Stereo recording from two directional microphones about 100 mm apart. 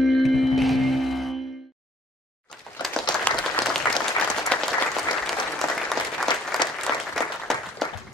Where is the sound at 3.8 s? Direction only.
25° left (ahead or behind).